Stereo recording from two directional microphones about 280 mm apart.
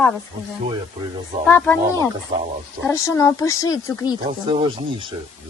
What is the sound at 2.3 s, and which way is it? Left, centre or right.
Speech, centre.